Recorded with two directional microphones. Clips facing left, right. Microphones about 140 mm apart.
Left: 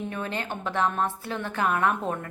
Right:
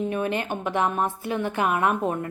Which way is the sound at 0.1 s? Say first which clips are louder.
Right 6 dB; 15° right (ahead or behind).